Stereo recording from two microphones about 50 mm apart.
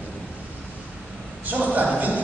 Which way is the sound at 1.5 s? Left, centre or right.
Right.